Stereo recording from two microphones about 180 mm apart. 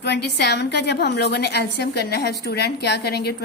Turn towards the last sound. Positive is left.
turn(degrees=65)  # may be behind; listen again after turning